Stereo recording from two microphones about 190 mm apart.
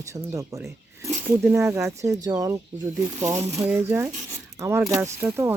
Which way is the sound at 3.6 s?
10° right (ahead or behind).